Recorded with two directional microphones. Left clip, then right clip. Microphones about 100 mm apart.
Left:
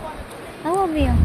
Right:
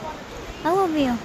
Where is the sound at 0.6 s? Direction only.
40° right (ahead or behind).